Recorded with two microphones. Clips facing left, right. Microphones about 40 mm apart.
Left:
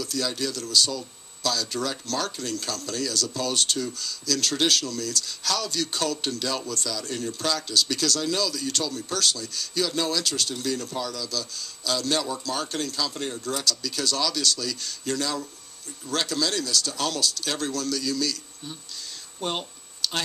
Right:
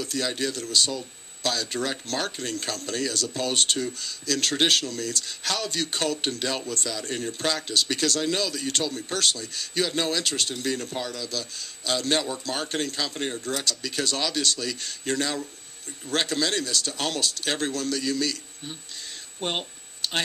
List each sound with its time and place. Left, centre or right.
0.0 s speech: right